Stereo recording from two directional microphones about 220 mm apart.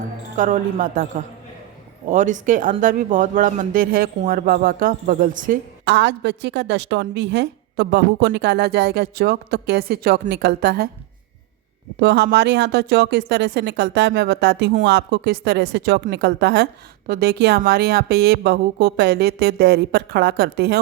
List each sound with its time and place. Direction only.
0.3 s speech: 35° right (ahead or behind)
2.0 s speech: 35° right (ahead or behind)
5.8 s a woman's voice: 50° right (ahead or behind)
11.9 s a woman's voice: 50° right (ahead or behind)